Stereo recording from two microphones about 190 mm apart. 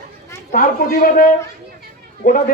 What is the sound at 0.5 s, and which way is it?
A man's voice, 50° left (ahead or behind).